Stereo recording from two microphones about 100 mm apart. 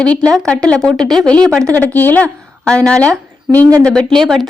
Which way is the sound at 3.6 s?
35° right (ahead or behind).